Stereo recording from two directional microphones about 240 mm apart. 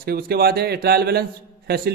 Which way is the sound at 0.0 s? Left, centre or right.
Right.